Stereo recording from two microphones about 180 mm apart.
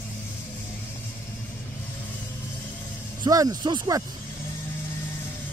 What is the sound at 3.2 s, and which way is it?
Speech, 20° right (ahead or behind).